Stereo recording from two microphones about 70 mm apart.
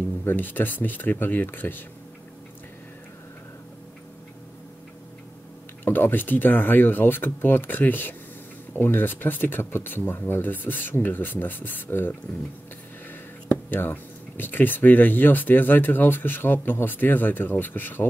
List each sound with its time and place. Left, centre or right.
0.2 s speech: left
5.9 s speech: left
13.5 s speech: left